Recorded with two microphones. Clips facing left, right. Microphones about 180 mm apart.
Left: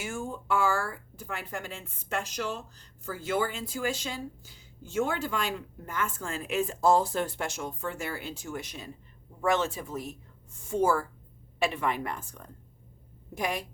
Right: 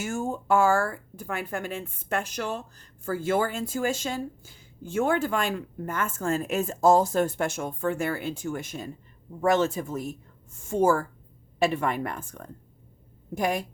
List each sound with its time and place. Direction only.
0.0 s speech: 45° right (ahead or behind)